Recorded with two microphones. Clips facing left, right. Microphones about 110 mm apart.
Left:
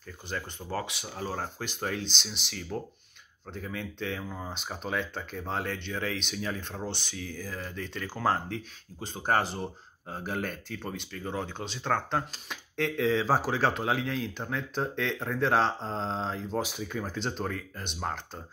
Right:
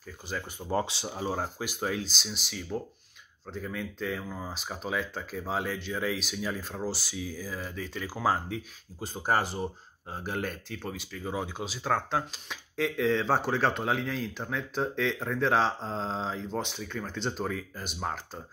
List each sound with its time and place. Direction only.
0.6 s speech: 15° right (ahead or behind)
0.8 s speech: 30° right (ahead or behind)
1.1 s speech: 15° right (ahead or behind)